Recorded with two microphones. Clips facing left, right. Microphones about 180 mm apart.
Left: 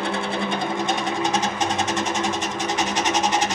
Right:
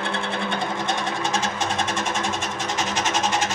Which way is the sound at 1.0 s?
15° left (ahead or behind).